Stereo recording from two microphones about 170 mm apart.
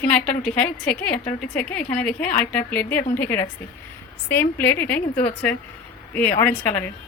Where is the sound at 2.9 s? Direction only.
50° left (ahead or behind).